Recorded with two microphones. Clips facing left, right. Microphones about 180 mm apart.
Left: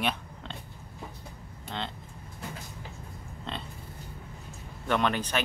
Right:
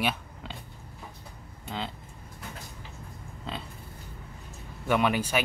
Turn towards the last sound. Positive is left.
turn(degrees=-10)  # may be behind; listen again after turning